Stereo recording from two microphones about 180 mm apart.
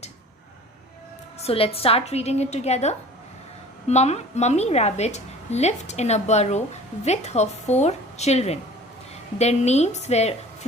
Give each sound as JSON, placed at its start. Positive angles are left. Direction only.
{"t": 1.4, "sound": "a woman's voice", "side_deg": 30}